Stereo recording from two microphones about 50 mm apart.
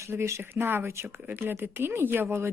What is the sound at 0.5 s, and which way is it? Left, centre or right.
Speech, right.